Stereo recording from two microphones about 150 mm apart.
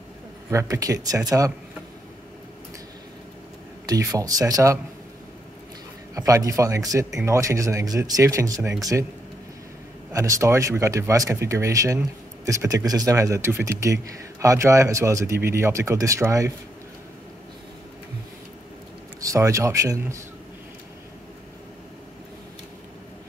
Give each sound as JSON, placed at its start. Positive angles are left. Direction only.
{"t": 0.5, "sound": "speech", "side_deg": -20}
{"t": 3.8, "sound": "speech", "side_deg": -25}
{"t": 6.1, "sound": "speech", "side_deg": -20}
{"t": 10.1, "sound": "speech", "side_deg": -20}
{"t": 19.2, "sound": "speech", "side_deg": -20}